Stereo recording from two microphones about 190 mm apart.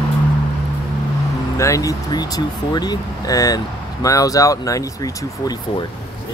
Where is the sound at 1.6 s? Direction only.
15° left (ahead or behind).